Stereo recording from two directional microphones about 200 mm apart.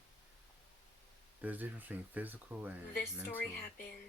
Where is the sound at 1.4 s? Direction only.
10° right (ahead or behind).